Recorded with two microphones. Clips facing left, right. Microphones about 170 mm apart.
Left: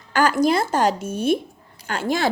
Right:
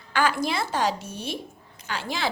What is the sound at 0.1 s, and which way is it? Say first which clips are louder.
Speech: left 7 dB; 45° left (ahead or behind).